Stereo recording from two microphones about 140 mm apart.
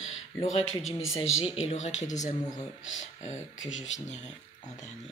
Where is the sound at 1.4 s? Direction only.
45° left (ahead or behind).